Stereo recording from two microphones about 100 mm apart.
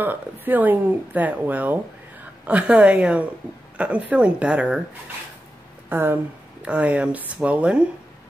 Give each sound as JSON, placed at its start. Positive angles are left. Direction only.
{"t": 0.0, "sound": "speech", "side_deg": -20}
{"t": 5.9, "sound": "speech", "side_deg": -20}